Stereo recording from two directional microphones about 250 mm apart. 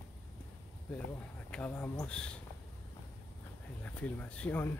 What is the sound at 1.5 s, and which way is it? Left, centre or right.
Speech, centre.